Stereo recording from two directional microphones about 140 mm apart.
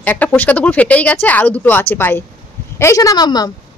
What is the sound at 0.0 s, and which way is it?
A woman's voice, 10° left (ahead or behind).